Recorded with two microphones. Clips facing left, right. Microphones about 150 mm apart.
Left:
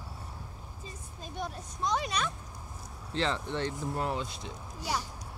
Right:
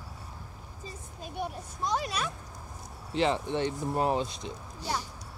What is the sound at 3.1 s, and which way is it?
Speech, 15° right (ahead or behind).